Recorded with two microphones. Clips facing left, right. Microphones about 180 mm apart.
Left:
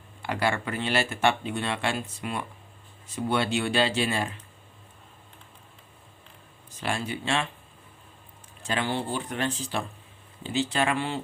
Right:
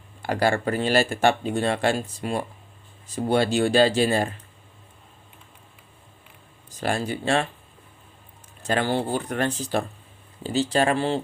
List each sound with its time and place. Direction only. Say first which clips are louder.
0.2 s speech: right 5 dB; 40° right (ahead or behind)
6.7 s speech: right 5 dB; 40° right (ahead or behind)
8.6 s speech: right 5 dB; 40° right (ahead or behind)